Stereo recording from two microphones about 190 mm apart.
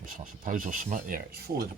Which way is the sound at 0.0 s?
45° right (ahead or behind).